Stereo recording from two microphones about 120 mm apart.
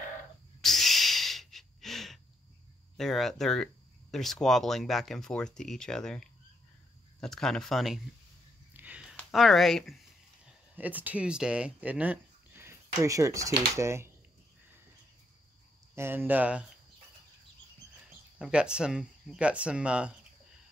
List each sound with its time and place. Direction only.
0.6 s snort: centre (ahead or behind)
3.0 s speech: centre (ahead or behind)
8.7 s a sound: 10° right (ahead or behind)
9.3 s speech: centre (ahead or behind)
10.4 s speech: 15° right (ahead or behind)
15.9 s speech: 20° right (ahead or behind)
18.4 s speech: 10° right (ahead or behind)